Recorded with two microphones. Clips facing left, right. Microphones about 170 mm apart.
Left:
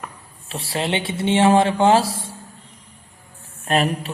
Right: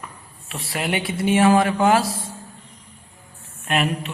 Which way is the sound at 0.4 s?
30° left (ahead or behind).